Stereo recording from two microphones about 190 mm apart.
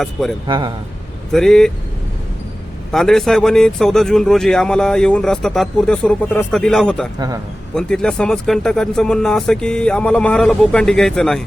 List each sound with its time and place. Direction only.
0.0 s a man's voice: centre (ahead or behind)
0.4 s a man's voice: 25° right (ahead or behind)
1.3 s a man's voice: centre (ahead or behind)
2.9 s a man's voice: centre (ahead or behind)